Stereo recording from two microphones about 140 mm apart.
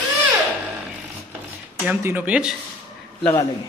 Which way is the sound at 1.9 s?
15° right (ahead or behind).